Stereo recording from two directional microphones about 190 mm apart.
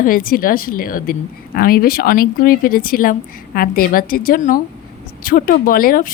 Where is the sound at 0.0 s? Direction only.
50° left (ahead or behind).